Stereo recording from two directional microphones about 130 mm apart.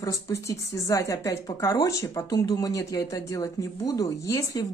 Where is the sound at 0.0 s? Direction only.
25° left (ahead or behind).